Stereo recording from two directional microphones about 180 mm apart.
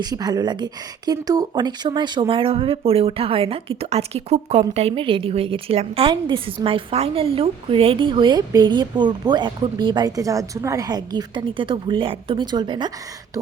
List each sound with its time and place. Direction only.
0.0 s speech: 20° right (ahead or behind)